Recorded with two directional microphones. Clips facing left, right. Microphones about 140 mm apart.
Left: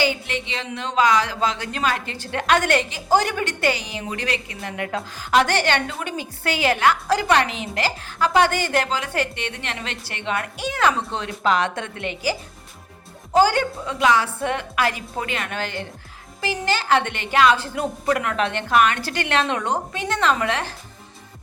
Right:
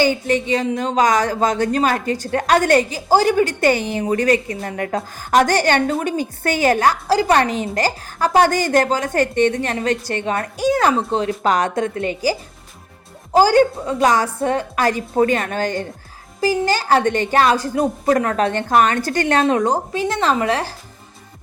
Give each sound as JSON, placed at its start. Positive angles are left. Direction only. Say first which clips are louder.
{"t": 0.0, "sound": "a woman's voice", "louder": "right 6 dB", "side_deg": -45}
{"t": 4.0, "sound": "a woman's voice", "louder": "right 11 dB", "side_deg": -45}
{"t": 13.4, "sound": "a woman's voice", "louder": "right 7 dB", "side_deg": -35}